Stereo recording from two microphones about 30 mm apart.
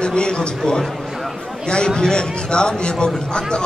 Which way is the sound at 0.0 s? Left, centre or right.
Left.